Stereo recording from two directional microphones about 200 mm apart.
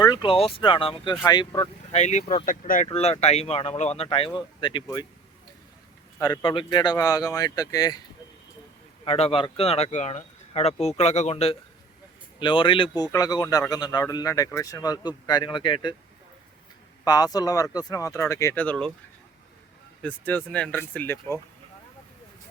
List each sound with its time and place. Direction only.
0.0 s speech: 20° left (ahead or behind)
2.0 s speech: 35° left (ahead or behind)
2.8 s speech: 30° left (ahead or behind)
6.1 s speech: 20° left (ahead or behind)
9.0 s speech: 30° left (ahead or behind)
17.0 s speech: 20° left (ahead or behind)
20.0 s speech: 10° left (ahead or behind)